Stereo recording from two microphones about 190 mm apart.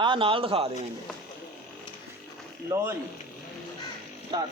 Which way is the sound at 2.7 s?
10° right (ahead or behind).